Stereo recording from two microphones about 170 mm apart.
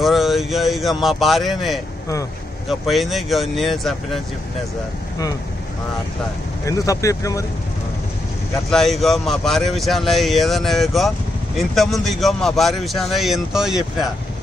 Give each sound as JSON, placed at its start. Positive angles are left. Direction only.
{"t": 0.0, "sound": "a man's voice", "side_deg": 0}
{"t": 6.6, "sound": "speech", "side_deg": 20}
{"t": 8.6, "sound": "a man's voice", "side_deg": 0}